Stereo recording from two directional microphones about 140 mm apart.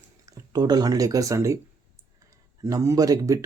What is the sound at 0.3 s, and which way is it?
Speech, 25° right (ahead or behind).